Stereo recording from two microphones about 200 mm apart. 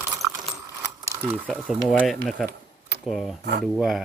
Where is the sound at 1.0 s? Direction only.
15° right (ahead or behind).